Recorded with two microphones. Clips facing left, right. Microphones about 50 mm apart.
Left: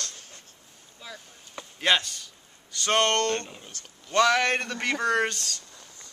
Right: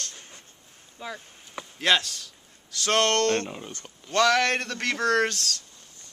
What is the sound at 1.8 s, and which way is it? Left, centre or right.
A man's voice, centre.